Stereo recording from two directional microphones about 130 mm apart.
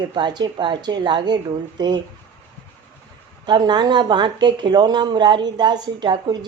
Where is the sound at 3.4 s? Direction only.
35° right (ahead or behind).